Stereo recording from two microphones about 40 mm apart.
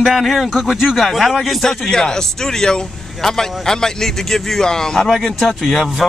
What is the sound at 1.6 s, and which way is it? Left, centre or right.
Speech, centre.